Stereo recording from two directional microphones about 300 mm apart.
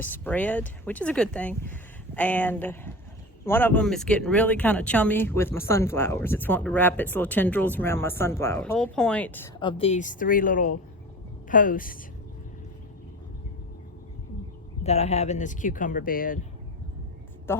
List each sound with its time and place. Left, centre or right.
0.0 s speech: centre; by 11.9 s left
14.8 s speech: left
17.5 s a woman's voice: centre